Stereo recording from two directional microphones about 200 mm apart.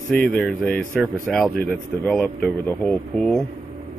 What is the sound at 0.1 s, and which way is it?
Speech, 5° left (ahead or behind).